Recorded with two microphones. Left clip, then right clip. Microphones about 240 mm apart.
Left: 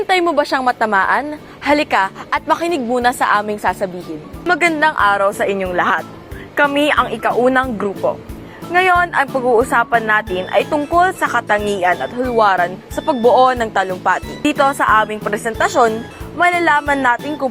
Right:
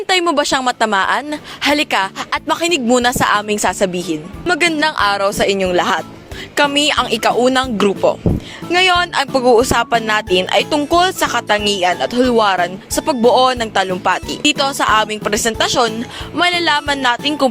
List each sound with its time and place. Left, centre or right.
0.1 s speech: right
0.8 s a woman's voice: right
3.6 s speech: right
4.8 s speech: right
9.7 s speech: right
12.4 s speech: right